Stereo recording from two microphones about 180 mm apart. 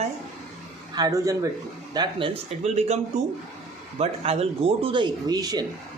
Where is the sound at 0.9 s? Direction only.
20° right (ahead or behind).